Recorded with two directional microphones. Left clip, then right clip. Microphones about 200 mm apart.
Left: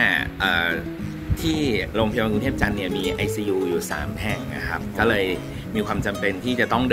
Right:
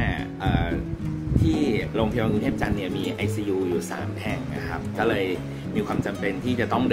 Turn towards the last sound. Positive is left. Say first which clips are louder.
# left 3 dB
turn(degrees=-15)  # may be behind; listen again after turning